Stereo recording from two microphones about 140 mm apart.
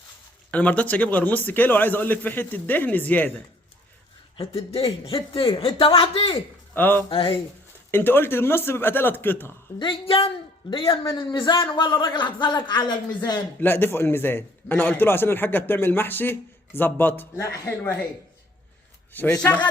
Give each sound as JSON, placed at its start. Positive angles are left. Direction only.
{"t": 0.5, "sound": "a man's voice", "side_deg": 10}
{"t": 4.4, "sound": "a man's voice", "side_deg": 45}
{"t": 6.7, "sound": "a man's voice", "side_deg": 15}
{"t": 7.1, "sound": "a man's voice", "side_deg": 40}
{"t": 7.9, "sound": "a man's voice", "side_deg": 15}
{"t": 9.7, "sound": "a man's voice", "side_deg": 40}
{"t": 13.6, "sound": "a man's voice", "side_deg": 15}
{"t": 19.1, "sound": "a man's voice", "side_deg": 15}